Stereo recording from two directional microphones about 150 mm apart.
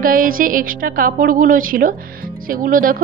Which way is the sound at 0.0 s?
70° right (ahead or behind).